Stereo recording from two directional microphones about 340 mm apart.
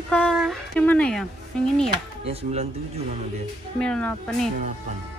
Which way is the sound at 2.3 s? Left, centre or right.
Centre.